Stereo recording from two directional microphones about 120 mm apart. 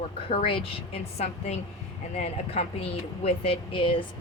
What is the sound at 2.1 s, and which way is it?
Speech, 65° left (ahead or behind).